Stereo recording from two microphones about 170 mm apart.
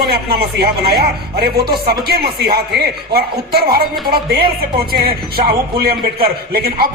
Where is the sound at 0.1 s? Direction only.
65° right (ahead or behind).